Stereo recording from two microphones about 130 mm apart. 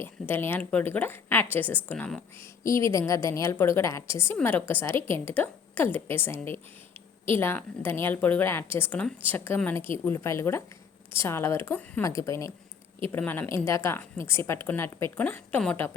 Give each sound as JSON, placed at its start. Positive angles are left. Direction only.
{"t": 0.0, "sound": "a woman's voice", "side_deg": 15}
{"t": 2.6, "sound": "a woman's voice", "side_deg": 25}